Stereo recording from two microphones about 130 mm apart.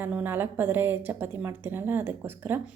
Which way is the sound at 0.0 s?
15° right (ahead or behind).